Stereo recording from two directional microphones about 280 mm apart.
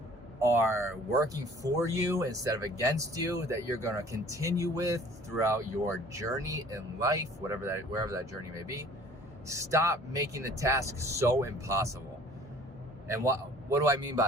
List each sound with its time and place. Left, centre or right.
0.3 s speech: centre
13.1 s speech: centre